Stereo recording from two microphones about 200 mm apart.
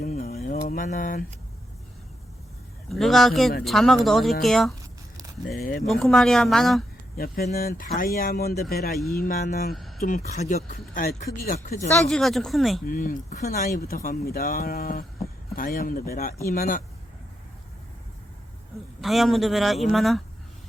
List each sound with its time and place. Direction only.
0.0 s a sound: 40° left (ahead or behind)
2.9 s speech: centre (ahead or behind)
5.5 s speech: 45° left (ahead or behind)
5.9 s speech: centre (ahead or behind)
7.2 s speech: 50° left (ahead or behind)
11.9 s speech: 5° left (ahead or behind)
12.9 s speech: 45° left (ahead or behind)
19.0 s speech: centre (ahead or behind)